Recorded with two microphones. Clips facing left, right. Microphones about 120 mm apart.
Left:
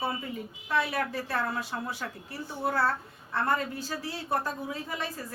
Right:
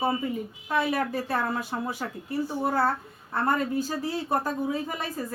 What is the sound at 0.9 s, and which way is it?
Speech, 45° right (ahead or behind).